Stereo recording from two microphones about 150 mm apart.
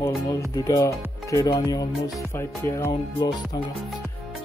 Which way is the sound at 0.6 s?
20° left (ahead or behind).